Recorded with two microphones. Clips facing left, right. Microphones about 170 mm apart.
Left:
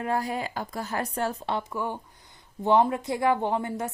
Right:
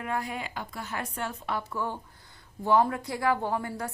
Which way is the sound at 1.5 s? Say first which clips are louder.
Left 2 dB; 15° left (ahead or behind).